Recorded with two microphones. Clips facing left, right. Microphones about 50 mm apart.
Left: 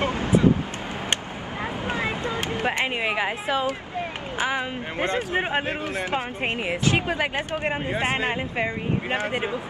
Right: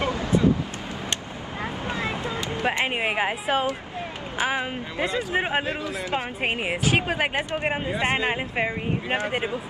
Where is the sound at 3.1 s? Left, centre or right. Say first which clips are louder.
Right 1 dB; right.